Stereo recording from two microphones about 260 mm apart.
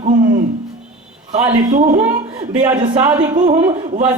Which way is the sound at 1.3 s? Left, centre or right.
Right.